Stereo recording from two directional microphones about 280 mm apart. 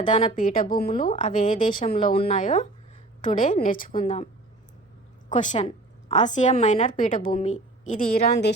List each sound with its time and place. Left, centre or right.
0.0 s a woman's voice: left
5.3 s a woman's voice: left